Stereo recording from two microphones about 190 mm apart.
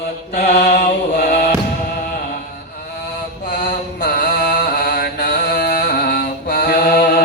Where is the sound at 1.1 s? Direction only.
55° left (ahead or behind).